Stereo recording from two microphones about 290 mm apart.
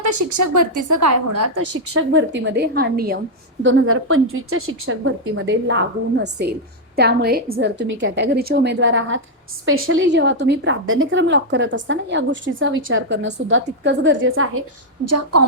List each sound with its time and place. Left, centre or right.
0.0 s a woman's voice: right
1.7 s a woman's voice: right
3.6 s a woman's voice: right
15.0 s a woman's voice: right